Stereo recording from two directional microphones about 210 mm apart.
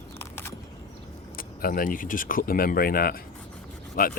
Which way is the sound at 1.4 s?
40° left (ahead or behind).